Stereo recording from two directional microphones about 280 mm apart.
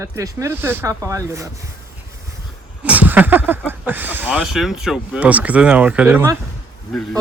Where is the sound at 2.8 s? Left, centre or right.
Centre.